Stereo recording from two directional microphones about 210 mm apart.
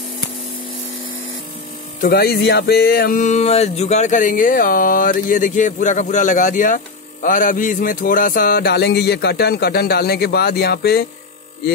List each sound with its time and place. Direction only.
2.0 s music: 45° left (ahead or behind)